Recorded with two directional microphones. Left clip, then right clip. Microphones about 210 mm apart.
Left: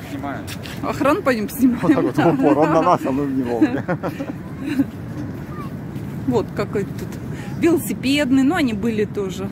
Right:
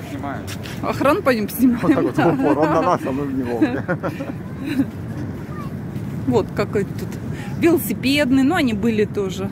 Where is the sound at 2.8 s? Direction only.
50° left (ahead or behind).